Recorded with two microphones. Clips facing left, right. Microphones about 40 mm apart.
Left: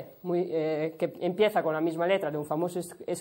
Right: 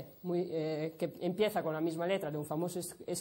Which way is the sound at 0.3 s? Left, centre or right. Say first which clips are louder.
Left 7 dB; left.